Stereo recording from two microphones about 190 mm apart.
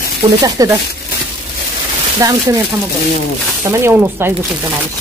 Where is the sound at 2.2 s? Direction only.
20° right (ahead or behind).